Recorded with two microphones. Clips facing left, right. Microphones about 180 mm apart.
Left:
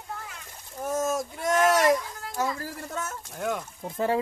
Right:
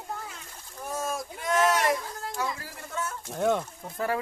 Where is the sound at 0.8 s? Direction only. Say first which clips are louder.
Left 5 dB; 45° left (ahead or behind).